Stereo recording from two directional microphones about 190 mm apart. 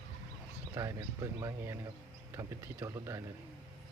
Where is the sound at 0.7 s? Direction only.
15° right (ahead or behind).